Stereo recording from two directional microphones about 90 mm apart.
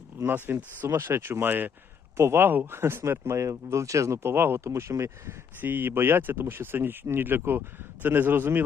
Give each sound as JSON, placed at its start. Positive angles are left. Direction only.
{"t": 0.2, "sound": "speech", "side_deg": -25}